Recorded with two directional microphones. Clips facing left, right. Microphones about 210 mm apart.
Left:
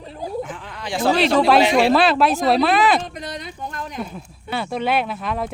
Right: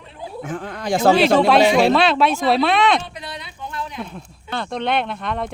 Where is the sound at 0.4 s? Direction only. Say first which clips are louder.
Right 6 dB; 45° right (ahead or behind).